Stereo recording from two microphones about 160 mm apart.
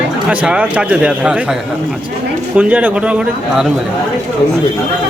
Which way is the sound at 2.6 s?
10° right (ahead or behind).